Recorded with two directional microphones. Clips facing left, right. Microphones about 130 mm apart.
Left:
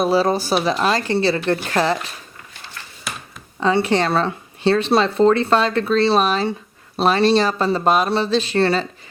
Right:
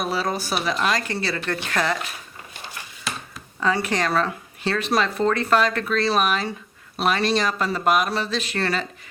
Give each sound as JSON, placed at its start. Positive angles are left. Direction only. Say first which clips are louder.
{"t": 0.0, "sound": "speech", "louder": "left 8 dB", "side_deg": 30}
{"t": 2.5, "sound": "a sound", "louder": "right 2 dB", "side_deg": -15}
{"t": 3.6, "sound": "speech", "louder": "left 5 dB", "side_deg": 30}